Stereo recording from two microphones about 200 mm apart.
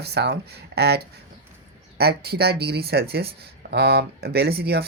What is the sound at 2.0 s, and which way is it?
Speech, 50° right (ahead or behind).